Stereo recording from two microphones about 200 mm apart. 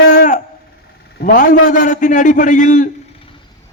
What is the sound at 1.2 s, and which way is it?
A man's voice, 40° left (ahead or behind).